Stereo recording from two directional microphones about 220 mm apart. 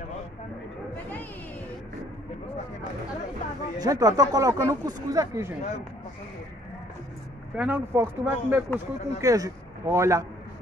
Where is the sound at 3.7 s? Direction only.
15° right (ahead or behind).